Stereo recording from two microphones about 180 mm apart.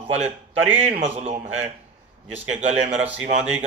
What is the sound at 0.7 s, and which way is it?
Speech, 5° right (ahead or behind).